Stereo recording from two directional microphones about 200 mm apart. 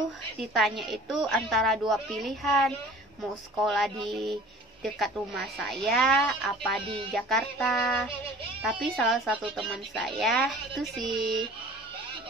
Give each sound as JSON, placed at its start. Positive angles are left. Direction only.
{"t": 0.6, "sound": "a woman's voice", "side_deg": 0}